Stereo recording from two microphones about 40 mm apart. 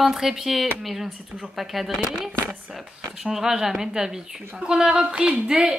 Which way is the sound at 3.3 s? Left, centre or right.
Centre.